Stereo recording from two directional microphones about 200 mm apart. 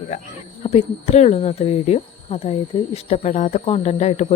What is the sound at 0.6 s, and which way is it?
Speech, 35° left (ahead or behind).